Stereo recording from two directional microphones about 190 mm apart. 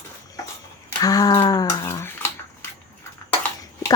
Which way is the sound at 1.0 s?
20° left (ahead or behind).